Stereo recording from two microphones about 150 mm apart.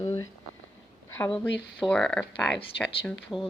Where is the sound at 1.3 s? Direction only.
5° left (ahead or behind).